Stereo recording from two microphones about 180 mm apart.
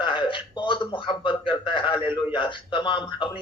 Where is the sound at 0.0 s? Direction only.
25° left (ahead or behind).